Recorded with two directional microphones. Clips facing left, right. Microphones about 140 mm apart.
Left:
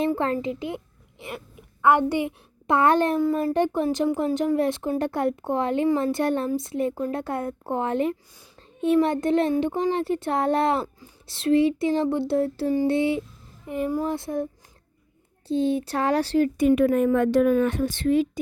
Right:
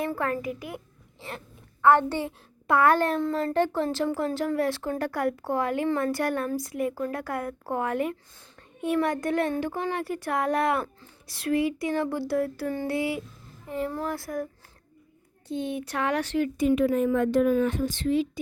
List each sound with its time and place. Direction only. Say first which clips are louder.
0.0 s speech: left 5 dB; 25° left (ahead or behind)
1.8 s a woman's voice: left 1 dB; 15° left (ahead or behind)
15.4 s speech: left 8 dB; 30° left (ahead or behind)
16.6 s a woman's voice: left 2 dB; 60° left (ahead or behind)